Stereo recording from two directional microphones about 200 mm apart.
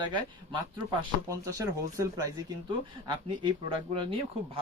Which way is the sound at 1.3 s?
15° right (ahead or behind).